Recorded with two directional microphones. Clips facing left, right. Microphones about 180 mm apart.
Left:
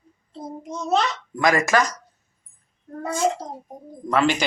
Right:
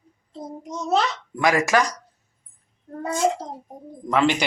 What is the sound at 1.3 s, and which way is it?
Speech, 10° right (ahead or behind).